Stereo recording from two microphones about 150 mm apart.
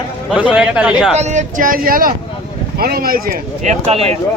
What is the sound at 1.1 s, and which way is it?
Speech, 50° right (ahead or behind).